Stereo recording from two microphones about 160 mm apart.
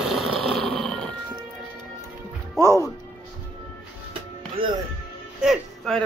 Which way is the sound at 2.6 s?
20° left (ahead or behind).